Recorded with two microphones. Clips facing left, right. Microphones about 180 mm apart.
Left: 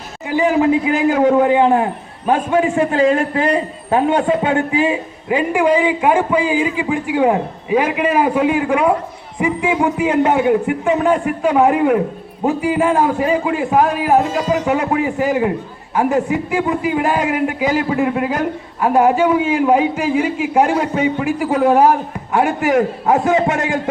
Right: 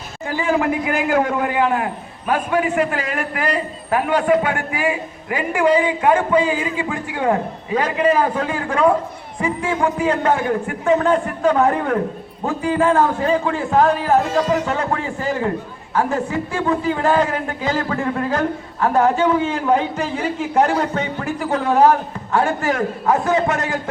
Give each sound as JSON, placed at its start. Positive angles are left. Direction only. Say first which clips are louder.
{"t": 0.3, "sound": "a man's voice", "louder": "left 5 dB", "side_deg": 20}